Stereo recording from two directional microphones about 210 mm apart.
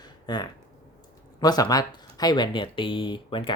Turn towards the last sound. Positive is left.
turn(degrees=25)  # may be behind; listen again after turning